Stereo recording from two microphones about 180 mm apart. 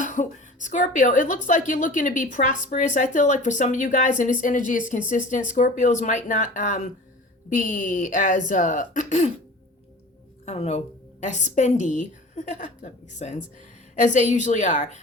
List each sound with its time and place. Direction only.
0.0 s a woman's voice: 45° left (ahead or behind)
10.4 s a woman's voice: 40° left (ahead or behind)